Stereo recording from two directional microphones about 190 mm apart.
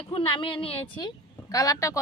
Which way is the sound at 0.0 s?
30° left (ahead or behind).